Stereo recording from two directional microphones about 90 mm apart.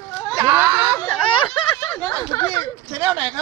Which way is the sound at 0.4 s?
30° right (ahead or behind).